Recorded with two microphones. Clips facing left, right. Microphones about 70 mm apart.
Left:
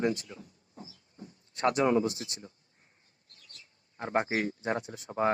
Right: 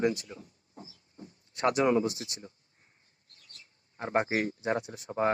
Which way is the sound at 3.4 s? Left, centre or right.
Right.